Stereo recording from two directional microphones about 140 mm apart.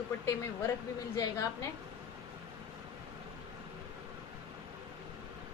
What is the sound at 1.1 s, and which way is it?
Speech, 25° left (ahead or behind).